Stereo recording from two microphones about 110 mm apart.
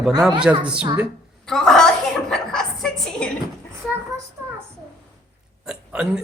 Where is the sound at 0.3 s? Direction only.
10° right (ahead or behind).